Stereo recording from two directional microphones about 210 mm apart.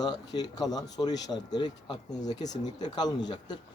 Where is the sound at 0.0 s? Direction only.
20° left (ahead or behind).